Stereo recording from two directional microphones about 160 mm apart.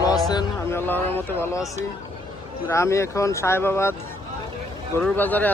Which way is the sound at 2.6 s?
15° left (ahead or behind).